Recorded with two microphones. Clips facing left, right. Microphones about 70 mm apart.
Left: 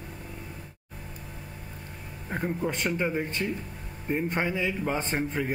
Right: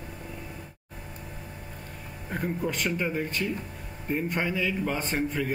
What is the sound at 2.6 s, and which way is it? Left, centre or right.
A man's voice, centre.